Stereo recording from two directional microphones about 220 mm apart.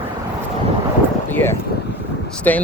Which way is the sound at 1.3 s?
10° left (ahead or behind).